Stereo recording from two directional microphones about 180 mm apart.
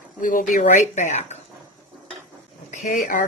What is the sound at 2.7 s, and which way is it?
Speech, 40° left (ahead or behind).